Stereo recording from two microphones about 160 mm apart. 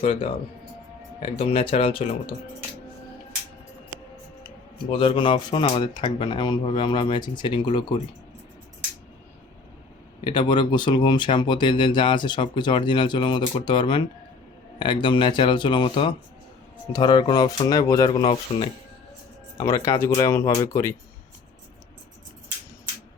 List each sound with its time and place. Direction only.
0.0 s speech: 35° left (ahead or behind)
4.9 s speech: 35° left (ahead or behind)
10.2 s speech: 30° left (ahead or behind)
15.0 s speech: 30° left (ahead or behind)
19.5 s speech: 15° left (ahead or behind)